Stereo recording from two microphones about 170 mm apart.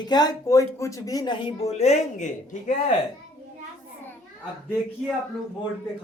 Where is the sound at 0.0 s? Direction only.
25° left (ahead or behind); by 2.9 s 45° left (ahead or behind).